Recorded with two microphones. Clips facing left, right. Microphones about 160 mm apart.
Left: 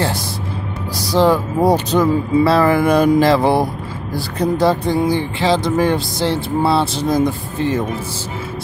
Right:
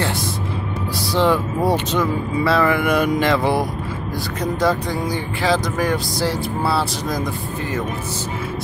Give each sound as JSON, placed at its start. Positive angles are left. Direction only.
{"t": 0.9, "sound": "speech", "side_deg": 40}